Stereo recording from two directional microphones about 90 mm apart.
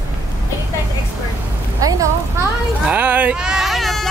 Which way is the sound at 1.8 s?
40° right (ahead or behind).